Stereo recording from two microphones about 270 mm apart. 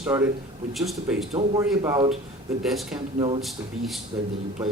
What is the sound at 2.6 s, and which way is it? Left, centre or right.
Speech, centre.